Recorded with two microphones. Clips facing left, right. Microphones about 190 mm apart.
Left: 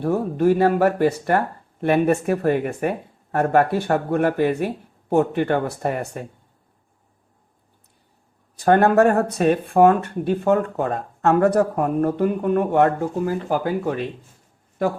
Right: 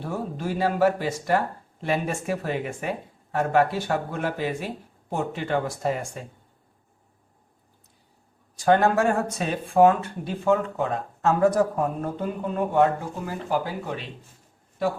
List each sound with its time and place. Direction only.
0.0 s speech: 60° left (ahead or behind)
8.5 s speech: 55° left (ahead or behind)
11.3 s speech: 65° left (ahead or behind)